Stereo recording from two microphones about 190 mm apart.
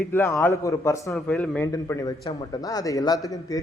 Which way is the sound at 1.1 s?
5° left (ahead or behind).